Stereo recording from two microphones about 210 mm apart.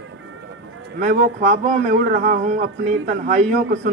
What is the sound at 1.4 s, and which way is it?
Speech, 35° right (ahead or behind).